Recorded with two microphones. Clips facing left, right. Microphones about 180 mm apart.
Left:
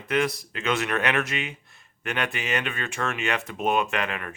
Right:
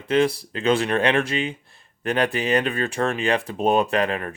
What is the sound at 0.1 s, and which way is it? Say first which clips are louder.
Speech: right 5 dB; 30° right (ahead or behind).